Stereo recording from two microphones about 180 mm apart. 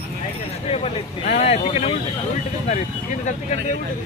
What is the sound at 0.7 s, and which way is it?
Speech, 35° left (ahead or behind).